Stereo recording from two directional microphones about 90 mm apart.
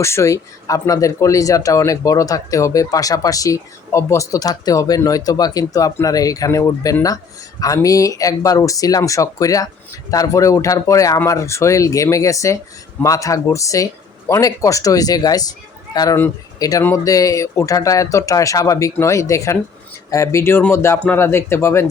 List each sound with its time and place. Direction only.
0.0 s speech: 30° left (ahead or behind)
16.6 s speech: 40° left (ahead or behind)